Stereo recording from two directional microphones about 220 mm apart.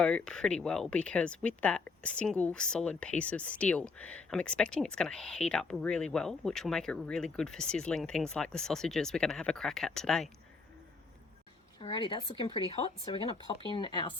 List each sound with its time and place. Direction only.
0.0 s speech: 5° left (ahead or behind)
11.8 s speech: 20° left (ahead or behind)